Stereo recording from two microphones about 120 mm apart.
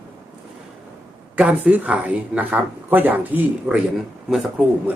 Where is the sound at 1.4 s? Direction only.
10° right (ahead or behind).